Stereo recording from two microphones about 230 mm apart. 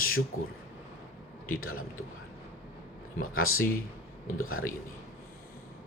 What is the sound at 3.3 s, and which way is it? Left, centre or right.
Speech, left.